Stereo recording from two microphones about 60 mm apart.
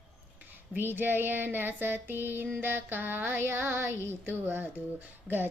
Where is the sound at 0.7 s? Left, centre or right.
Right.